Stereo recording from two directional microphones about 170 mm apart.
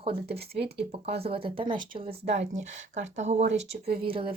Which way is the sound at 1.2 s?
35° right (ahead or behind).